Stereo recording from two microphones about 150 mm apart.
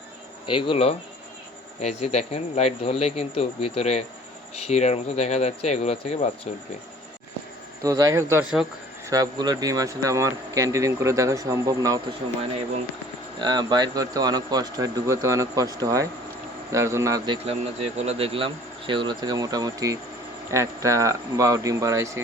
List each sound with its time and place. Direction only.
0.4 s speech: 35° left (ahead or behind)
7.8 s speech: 25° right (ahead or behind)
13.4 s speech: 30° right (ahead or behind)
17.3 s speech: 45° right (ahead or behind); by 22.2 s 20° right (ahead or behind)